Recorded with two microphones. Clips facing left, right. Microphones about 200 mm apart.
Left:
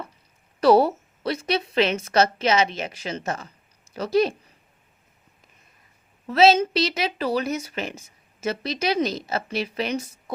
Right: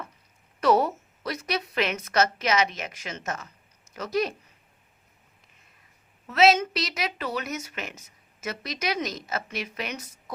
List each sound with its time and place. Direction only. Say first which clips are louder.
0.6 s a woman's voice: left 5 dB; 30° left (ahead or behind)
6.2 s a woman's voice: left 4 dB; 30° left (ahead or behind)